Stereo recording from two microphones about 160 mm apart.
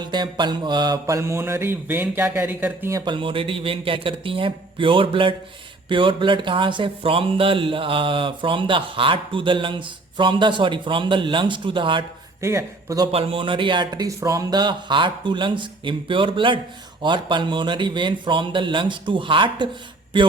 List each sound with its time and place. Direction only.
0.0 s mantra: 30° right (ahead or behind)
3.0 s speech: 30° right (ahead or behind)
12.4 s a man's voice: 15° right (ahead or behind)
13.1 s speech: 35° right (ahead or behind)